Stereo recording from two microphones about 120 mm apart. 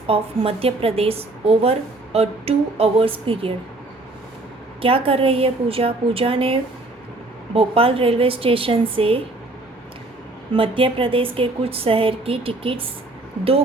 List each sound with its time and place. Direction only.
0.1 s a woman's voice: 55° right (ahead or behind)
4.8 s speech: 50° right (ahead or behind)
10.5 s speech: 45° right (ahead or behind)